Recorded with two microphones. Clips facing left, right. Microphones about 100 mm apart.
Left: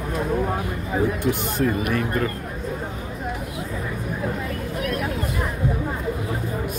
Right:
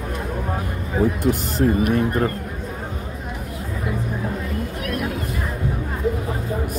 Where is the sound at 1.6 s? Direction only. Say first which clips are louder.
Right 5 dB; 35° right (ahead or behind).